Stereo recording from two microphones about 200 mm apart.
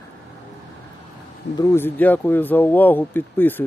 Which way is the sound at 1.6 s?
15° left (ahead or behind).